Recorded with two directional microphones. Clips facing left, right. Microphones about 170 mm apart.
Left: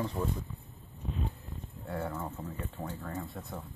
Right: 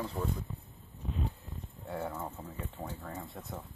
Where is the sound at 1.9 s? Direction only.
15° right (ahead or behind).